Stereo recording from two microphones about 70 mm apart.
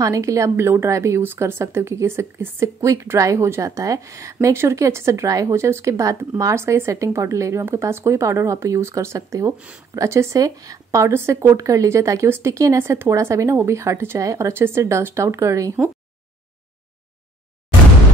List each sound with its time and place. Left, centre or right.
0.0 s speech: right
10.4 s speech: right